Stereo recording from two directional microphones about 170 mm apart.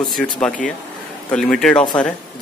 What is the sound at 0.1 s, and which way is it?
Speech, 5° left (ahead or behind).